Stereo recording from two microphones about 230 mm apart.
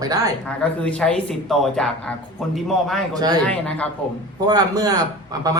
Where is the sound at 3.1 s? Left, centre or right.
Centre.